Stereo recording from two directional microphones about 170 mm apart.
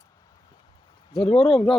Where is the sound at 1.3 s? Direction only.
5° left (ahead or behind).